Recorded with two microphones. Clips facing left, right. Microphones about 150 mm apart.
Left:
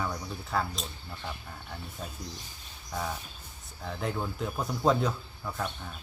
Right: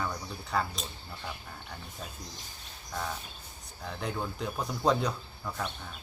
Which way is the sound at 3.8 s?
Centre (ahead or behind).